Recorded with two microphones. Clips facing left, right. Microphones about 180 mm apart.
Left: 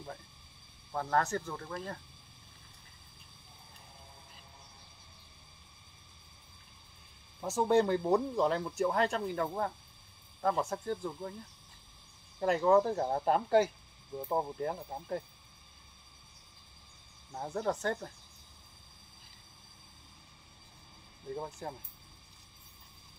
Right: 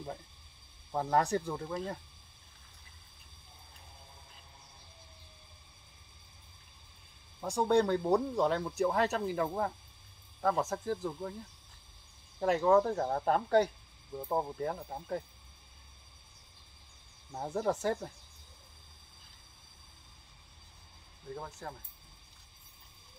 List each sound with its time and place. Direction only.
0.9 s speech: 15° right (ahead or behind)
7.3 s speech: 5° left (ahead or behind)
12.4 s speech: centre (ahead or behind)
17.3 s speech: 5° right (ahead or behind)
21.4 s speech: 15° left (ahead or behind)